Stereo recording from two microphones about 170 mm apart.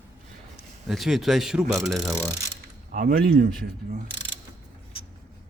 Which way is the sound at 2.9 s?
60° right (ahead or behind).